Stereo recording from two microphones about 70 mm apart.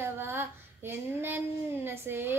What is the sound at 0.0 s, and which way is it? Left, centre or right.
Female singing, right.